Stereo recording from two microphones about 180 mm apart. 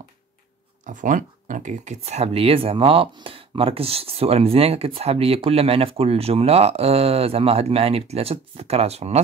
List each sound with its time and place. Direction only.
0.8 s speech: 45° right (ahead or behind)